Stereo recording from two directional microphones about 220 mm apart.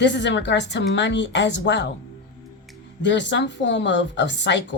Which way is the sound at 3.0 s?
55° left (ahead or behind).